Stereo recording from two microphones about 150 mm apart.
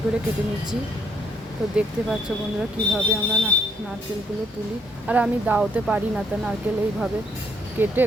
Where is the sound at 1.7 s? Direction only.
5° right (ahead or behind).